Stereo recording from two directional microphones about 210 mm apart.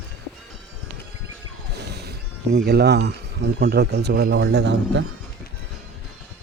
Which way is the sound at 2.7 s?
50° right (ahead or behind).